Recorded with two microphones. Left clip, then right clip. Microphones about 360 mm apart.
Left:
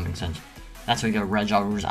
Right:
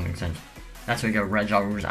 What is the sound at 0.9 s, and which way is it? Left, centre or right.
Speech, centre.